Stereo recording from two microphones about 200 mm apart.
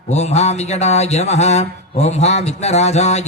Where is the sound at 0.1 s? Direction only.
35° left (ahead or behind).